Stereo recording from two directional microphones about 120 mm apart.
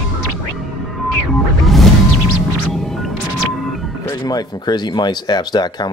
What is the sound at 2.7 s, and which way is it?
Music, centre (ahead or behind).